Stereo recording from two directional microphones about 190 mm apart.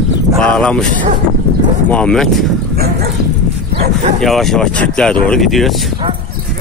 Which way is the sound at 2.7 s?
55° right (ahead or behind).